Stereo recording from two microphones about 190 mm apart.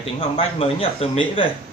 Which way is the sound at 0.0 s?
30° left (ahead or behind).